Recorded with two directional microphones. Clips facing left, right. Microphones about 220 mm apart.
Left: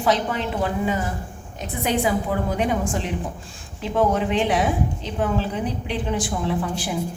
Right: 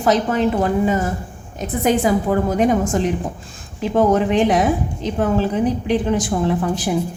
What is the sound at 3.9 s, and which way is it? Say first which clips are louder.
Speech: right 5 dB; 45° right (ahead or behind).